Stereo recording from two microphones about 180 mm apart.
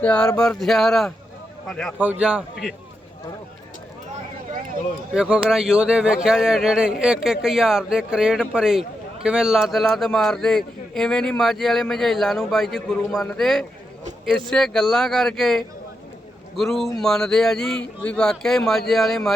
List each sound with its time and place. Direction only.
0.0 s a man's voice: 5° left (ahead or behind)
2.0 s a man's voice: 10° right (ahead or behind)
5.1 s a man's voice: 5° right (ahead or behind)